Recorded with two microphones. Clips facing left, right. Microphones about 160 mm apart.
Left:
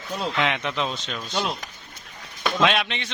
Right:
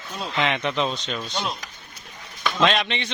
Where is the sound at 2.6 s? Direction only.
5° left (ahead or behind).